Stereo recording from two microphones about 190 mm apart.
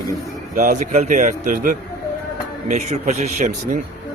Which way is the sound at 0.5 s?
45° right (ahead or behind).